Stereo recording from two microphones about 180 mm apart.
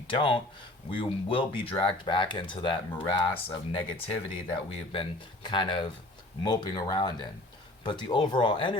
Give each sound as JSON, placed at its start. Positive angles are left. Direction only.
{"t": 0.1, "sound": "speech", "side_deg": 30}